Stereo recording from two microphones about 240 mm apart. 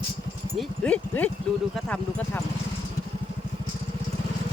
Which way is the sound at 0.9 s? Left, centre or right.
Centre.